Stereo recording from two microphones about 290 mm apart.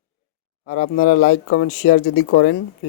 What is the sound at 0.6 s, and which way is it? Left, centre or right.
Speech, left.